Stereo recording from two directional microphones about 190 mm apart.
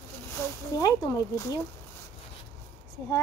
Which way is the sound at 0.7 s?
15° left (ahead or behind).